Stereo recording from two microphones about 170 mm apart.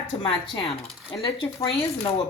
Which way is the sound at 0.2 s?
30° left (ahead or behind).